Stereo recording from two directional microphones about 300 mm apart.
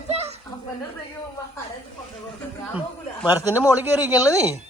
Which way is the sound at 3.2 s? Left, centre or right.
Centre.